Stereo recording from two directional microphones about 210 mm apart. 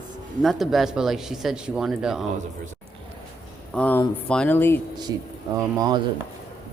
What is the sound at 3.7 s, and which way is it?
Speech, 5° left (ahead or behind).